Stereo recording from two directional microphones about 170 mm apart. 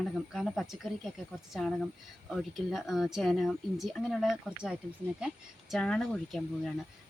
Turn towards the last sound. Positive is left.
turn(degrees=5)  # may be behind; listen again after turning